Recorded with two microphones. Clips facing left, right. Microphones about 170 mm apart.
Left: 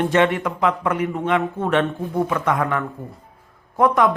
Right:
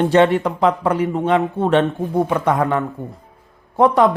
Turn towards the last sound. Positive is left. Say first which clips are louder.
# right 3 dB
turn(degrees=-25)  # may be behind; listen again after turning